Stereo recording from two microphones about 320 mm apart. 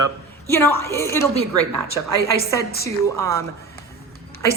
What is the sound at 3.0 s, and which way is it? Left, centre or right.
Speech, centre.